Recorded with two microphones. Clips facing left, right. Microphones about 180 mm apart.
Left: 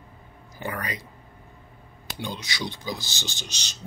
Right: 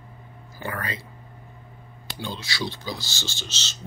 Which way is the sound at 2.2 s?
15° left (ahead or behind).